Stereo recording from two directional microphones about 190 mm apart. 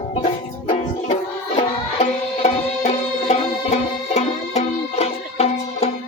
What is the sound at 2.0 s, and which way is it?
Music, 35° left (ahead or behind).